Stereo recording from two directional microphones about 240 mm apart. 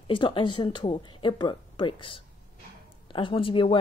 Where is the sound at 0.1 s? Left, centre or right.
Left.